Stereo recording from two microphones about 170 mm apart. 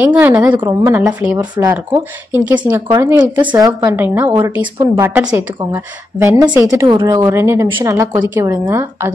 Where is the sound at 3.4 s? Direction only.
25° right (ahead or behind).